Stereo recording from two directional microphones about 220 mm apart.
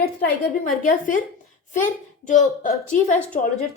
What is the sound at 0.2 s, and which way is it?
A woman's voice, 40° left (ahead or behind).